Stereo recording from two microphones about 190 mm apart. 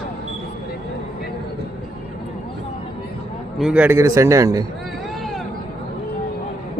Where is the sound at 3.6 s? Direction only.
5° right (ahead or behind).